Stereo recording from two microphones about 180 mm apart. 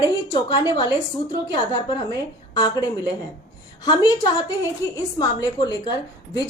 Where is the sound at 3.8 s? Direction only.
20° left (ahead or behind).